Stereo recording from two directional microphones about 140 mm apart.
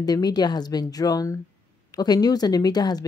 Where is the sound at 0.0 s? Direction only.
30° left (ahead or behind).